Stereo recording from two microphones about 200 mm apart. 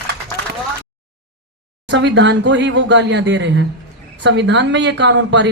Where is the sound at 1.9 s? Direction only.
60° right (ahead or behind).